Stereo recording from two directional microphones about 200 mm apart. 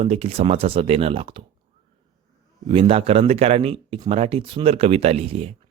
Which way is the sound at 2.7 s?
30° right (ahead or behind).